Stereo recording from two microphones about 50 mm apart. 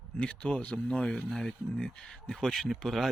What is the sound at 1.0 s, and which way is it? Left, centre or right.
Speech, centre.